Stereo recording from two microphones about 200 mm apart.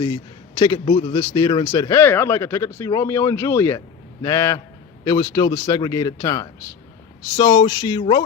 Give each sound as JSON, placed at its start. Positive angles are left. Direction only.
{"t": 0.6, "sound": "speech", "side_deg": 25}